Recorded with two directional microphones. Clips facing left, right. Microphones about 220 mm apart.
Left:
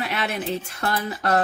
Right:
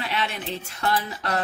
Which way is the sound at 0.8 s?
45° left (ahead or behind).